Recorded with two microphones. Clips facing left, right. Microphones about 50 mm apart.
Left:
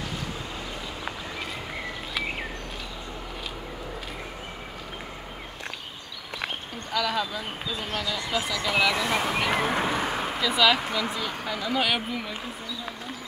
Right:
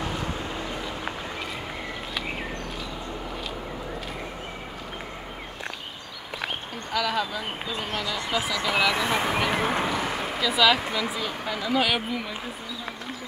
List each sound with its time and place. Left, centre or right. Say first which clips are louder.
6.4 s speech: right 1 dB; centre
8.9 s speech: right 1 dB; right
9.4 s speech: even; centre
9.8 s a sound: even; centre
10.3 s speech: right 1 dB; centre